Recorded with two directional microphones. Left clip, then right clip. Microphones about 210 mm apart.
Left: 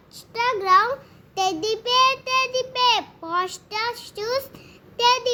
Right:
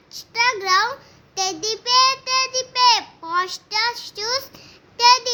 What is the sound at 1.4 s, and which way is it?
Child singing, 20° left (ahead or behind).